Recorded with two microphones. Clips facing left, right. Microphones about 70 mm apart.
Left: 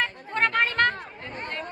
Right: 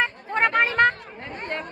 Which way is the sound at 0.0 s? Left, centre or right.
Centre.